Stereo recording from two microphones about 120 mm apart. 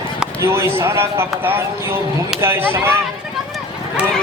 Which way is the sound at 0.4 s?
20° right (ahead or behind).